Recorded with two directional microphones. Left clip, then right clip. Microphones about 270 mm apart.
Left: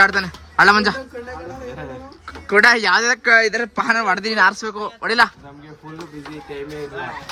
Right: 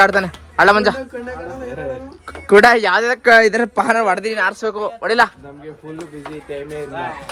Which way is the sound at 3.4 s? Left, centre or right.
Centre.